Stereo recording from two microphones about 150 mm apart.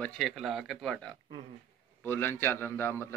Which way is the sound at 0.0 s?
Centre (ahead or behind).